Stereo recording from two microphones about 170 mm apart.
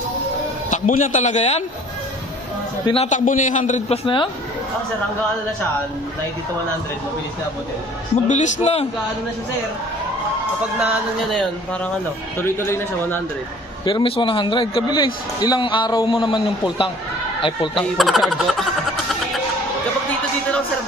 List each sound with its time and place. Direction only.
0.7 s a man's voice: 50° left (ahead or behind)
2.8 s a man's voice: 30° left (ahead or behind)
3.1 s a man's voice: 50° left (ahead or behind)
4.0 s a man's voice: 30° left (ahead or behind)
8.3 s a man's voice: 40° left (ahead or behind)
12.4 s a man's voice: 15° left (ahead or behind)
13.8 s a man's voice: 30° left (ahead or behind)
17.9 s speech: centre (ahead or behind)